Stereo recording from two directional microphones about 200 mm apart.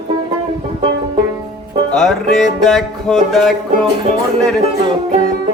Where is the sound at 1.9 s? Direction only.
Centre (ahead or behind).